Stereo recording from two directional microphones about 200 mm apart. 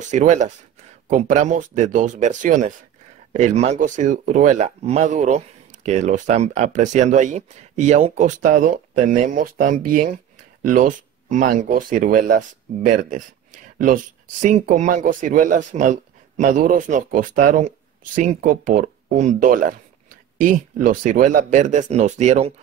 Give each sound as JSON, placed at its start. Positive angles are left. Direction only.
{"t": 0.1, "sound": "speech", "side_deg": -35}